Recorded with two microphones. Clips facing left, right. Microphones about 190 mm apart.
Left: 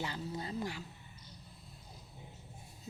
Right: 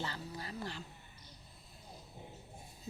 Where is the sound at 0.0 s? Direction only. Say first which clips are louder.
Left 3 dB; 20° left (ahead or behind).